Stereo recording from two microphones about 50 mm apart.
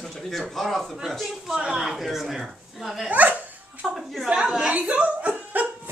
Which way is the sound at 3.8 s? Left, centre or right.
Centre.